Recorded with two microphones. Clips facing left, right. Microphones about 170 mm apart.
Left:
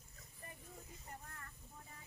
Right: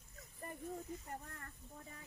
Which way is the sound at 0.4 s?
50° right (ahead or behind).